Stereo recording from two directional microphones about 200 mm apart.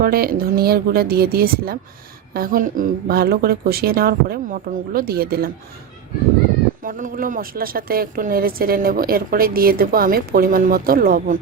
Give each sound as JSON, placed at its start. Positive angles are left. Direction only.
{"t": 0.0, "sound": "speech", "side_deg": -45}
{"t": 6.8, "sound": "speech", "side_deg": -40}